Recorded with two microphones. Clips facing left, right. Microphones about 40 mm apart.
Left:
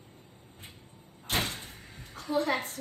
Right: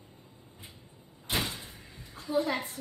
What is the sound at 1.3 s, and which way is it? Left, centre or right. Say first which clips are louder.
Door: left 1 dB; left.